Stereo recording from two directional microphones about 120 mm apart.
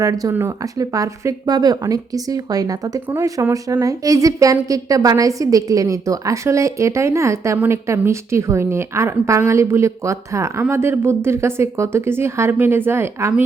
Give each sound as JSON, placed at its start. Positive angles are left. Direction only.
{"t": 0.0, "sound": "a woman's voice", "side_deg": -30}